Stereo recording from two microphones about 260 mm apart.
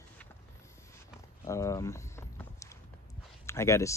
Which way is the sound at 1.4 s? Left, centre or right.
Centre.